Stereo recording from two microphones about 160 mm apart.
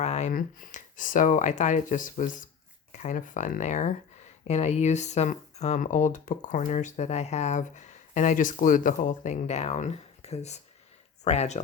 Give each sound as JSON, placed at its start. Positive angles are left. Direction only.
{"t": 0.0, "sound": "speech", "side_deg": 45}